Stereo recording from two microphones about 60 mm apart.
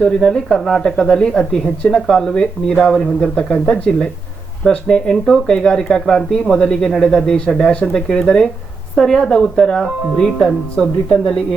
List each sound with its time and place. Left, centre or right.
0.0 s speech: centre
3.3 s speech: centre